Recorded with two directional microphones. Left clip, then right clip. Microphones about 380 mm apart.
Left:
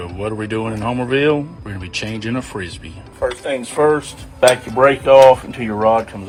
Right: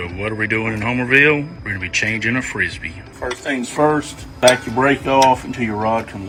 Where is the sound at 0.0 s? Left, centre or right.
Centre.